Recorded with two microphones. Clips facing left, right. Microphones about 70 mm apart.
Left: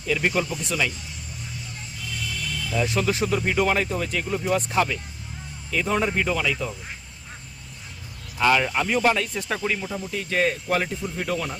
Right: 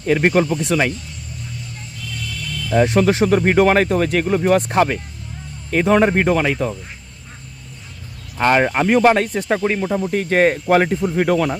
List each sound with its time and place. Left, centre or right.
0.0 s speech: right
2.2 s a sound: centre
2.7 s speech: right
8.4 s speech: right
10.9 s speech: right